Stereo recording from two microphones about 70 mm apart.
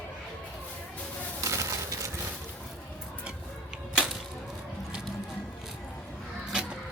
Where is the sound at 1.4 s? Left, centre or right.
Right.